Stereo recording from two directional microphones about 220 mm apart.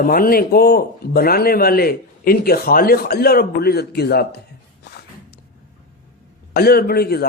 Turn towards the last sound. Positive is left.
turn(degrees=45)  # may be behind; listen again after turning